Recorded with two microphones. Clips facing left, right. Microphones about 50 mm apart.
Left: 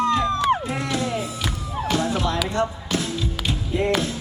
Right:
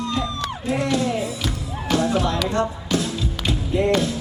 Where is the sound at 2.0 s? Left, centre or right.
Right.